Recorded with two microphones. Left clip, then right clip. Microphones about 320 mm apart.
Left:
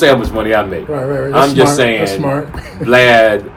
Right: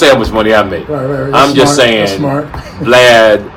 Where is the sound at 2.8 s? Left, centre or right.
Centre.